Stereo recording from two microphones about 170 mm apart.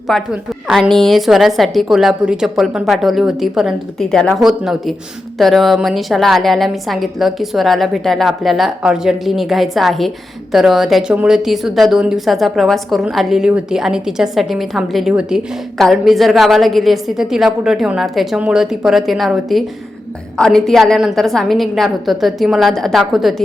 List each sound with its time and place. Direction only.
0.1 s a woman's voice: centre (ahead or behind)